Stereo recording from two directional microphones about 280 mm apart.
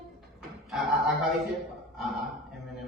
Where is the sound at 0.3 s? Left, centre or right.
Centre.